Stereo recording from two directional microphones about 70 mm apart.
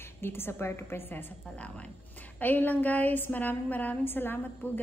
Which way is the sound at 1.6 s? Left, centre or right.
Centre.